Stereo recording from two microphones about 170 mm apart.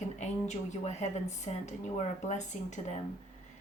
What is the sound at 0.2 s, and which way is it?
Speech, 45° left (ahead or behind).